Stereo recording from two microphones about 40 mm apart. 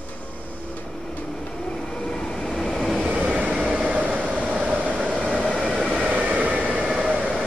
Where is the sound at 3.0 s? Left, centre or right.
Right.